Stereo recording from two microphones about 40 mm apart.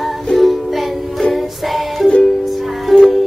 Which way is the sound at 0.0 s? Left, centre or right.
Centre.